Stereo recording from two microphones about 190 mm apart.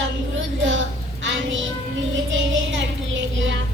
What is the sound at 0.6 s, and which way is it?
Child singing, 75° right (ahead or behind).